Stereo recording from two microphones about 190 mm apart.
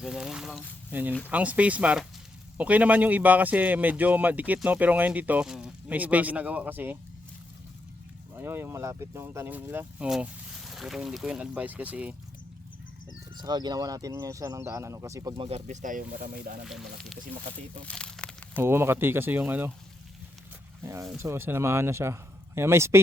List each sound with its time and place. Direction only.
0.0 s speech: 5° right (ahead or behind)
8.4 s speech: 10° right (ahead or behind)
13.3 s speech: 20° right (ahead or behind)
15.4 s speech: 35° right (ahead or behind)
16.6 s speech: centre (ahead or behind)
17.8 s crumpling: 5° left (ahead or behind)
18.5 s speech: 10° right (ahead or behind)
20.8 s speech: 15° right (ahead or behind)